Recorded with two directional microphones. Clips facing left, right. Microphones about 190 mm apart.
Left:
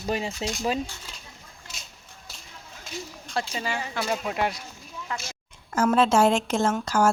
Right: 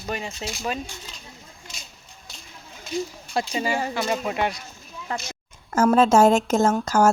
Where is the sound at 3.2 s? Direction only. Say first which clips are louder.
Right 2 dB; 10° right (ahead or behind).